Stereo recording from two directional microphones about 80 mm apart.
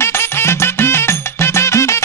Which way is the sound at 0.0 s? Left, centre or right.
Left.